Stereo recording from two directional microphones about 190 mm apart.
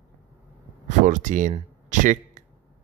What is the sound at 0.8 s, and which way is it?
Speech, 40° right (ahead or behind).